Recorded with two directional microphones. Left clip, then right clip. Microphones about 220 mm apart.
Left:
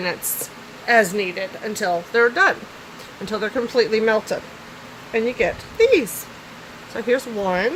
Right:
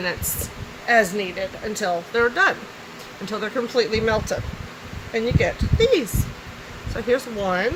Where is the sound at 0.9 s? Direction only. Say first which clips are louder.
Left 2 dB; 35° left (ahead or behind).